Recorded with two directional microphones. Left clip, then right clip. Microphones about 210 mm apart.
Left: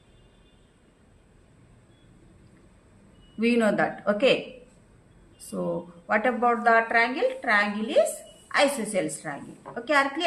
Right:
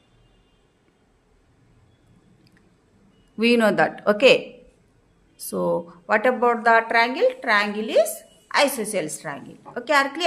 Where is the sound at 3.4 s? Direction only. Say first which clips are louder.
Right 5 dB; 55° right (ahead or behind).